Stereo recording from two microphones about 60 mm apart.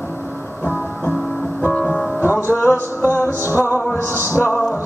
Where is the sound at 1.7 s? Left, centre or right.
Left.